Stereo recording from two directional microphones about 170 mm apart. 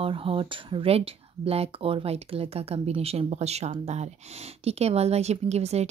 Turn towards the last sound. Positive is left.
turn(degrees=-40)  # may be behind; listen again after turning